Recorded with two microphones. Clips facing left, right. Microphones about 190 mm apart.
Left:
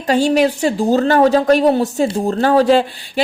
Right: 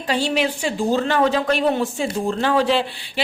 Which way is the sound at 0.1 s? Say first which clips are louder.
Left 7 dB; 45° left (ahead or behind).